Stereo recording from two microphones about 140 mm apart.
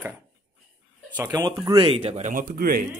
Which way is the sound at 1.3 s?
30° right (ahead or behind).